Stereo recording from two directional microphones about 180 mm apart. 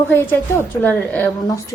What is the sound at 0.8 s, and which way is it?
Speech, 10° left (ahead or behind).